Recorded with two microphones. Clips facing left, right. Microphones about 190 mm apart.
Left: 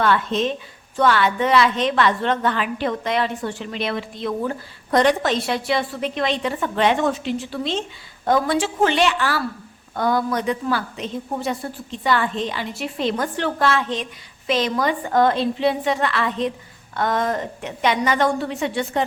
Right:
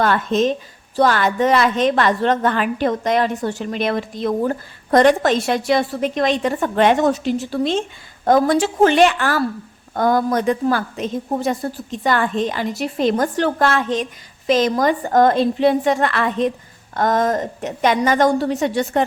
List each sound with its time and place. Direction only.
0.0 s a woman's voice: 45° right (ahead or behind)